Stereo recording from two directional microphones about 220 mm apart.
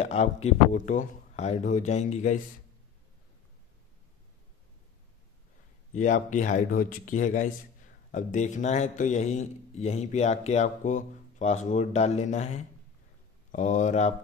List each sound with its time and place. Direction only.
0.0 s a man's voice: 30° left (ahead or behind)
5.9 s a man's voice: 35° left (ahead or behind)